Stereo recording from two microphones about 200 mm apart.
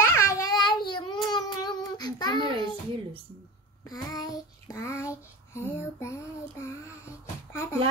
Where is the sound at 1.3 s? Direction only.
20° left (ahead or behind).